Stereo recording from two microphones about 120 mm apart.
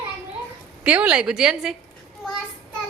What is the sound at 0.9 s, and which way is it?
Speech, 10° right (ahead or behind).